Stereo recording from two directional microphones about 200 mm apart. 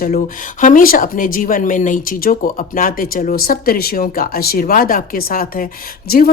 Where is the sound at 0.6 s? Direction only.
45° left (ahead or behind).